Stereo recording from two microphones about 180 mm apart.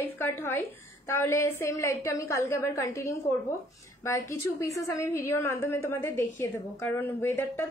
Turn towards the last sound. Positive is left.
turn(degrees=15)  # may be behind; listen again after turning